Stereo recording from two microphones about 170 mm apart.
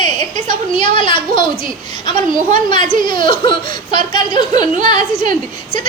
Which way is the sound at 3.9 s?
25° left (ahead or behind).